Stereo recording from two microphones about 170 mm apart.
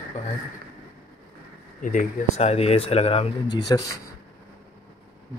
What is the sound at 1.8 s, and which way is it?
Speech, 50° left (ahead or behind).